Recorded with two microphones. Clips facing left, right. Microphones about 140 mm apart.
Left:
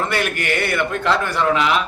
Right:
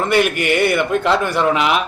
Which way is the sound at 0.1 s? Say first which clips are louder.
Right 6 dB; 15° right (ahead or behind).